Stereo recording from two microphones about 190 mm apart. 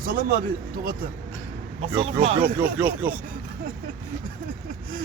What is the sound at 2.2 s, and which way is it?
Speech, 30° right (ahead or behind).